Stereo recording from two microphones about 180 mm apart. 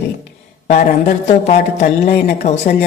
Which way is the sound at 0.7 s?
40° left (ahead or behind).